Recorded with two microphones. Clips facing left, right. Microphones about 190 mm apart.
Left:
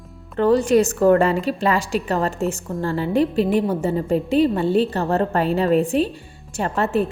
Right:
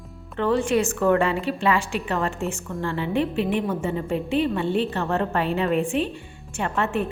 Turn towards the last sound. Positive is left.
turn(degrees=35)  # may be behind; listen again after turning